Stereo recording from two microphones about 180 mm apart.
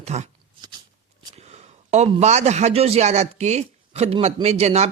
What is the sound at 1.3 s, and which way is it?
A man's voice, 35° right (ahead or behind).